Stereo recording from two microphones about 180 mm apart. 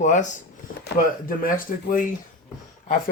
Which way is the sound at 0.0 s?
45° left (ahead or behind).